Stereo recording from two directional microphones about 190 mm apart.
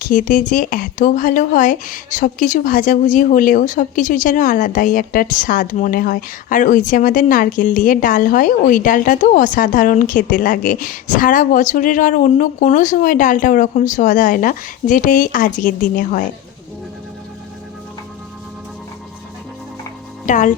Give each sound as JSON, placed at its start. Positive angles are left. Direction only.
{"t": 0.0, "sound": "speech", "side_deg": 45}
{"t": 20.2, "sound": "speech", "side_deg": 40}